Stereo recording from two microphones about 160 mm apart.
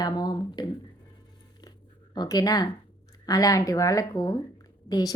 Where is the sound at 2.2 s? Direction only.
25° left (ahead or behind).